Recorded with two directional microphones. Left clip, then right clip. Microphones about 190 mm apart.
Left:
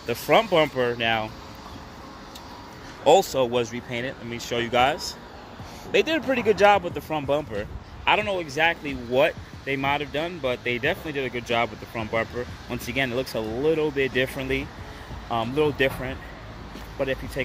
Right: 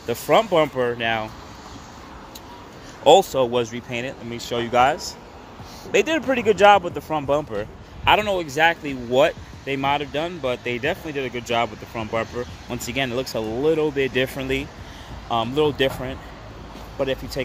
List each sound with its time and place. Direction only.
0.0 s speech: 10° right (ahead or behind)
3.0 s a man's voice: 20° right (ahead or behind)